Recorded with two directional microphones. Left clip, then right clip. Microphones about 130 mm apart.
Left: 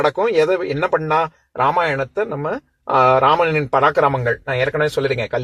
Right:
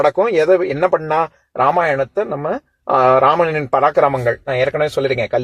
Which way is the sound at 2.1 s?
25° right (ahead or behind).